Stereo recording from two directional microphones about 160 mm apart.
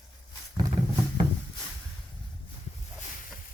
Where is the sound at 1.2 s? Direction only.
35° right (ahead or behind).